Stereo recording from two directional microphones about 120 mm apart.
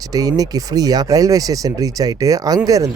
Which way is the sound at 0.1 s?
30° right (ahead or behind).